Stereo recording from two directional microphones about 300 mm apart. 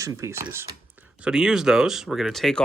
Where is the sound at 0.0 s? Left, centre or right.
Centre.